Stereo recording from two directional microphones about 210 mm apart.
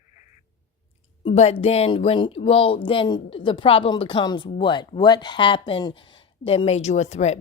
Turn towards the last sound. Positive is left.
turn(degrees=30)  # may be behind; listen again after turning